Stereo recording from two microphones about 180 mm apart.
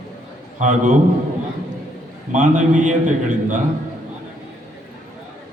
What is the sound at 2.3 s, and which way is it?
A man's voice, 45° right (ahead or behind).